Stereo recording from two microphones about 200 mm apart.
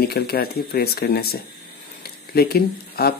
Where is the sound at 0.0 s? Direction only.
50° left (ahead or behind).